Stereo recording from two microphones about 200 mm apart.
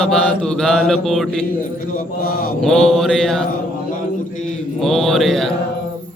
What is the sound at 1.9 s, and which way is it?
Mantra, 45° left (ahead or behind).